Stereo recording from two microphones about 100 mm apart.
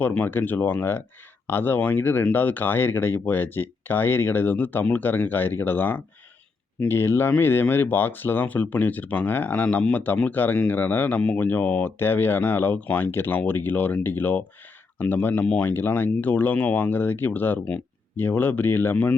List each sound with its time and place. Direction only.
0.0 s speech: 15° left (ahead or behind)